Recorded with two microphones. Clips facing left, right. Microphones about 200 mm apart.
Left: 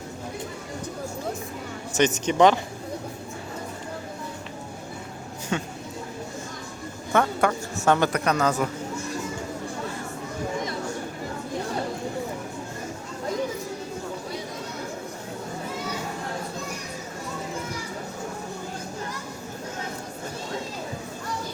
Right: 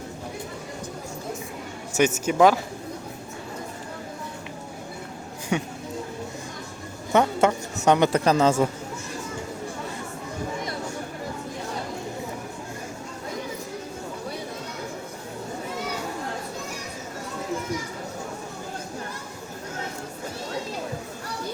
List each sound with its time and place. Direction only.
1.9 s speech: 10° right (ahead or behind)
5.5 s speech: 15° right (ahead or behind)
7.1 s a man's voice: 20° right (ahead or behind)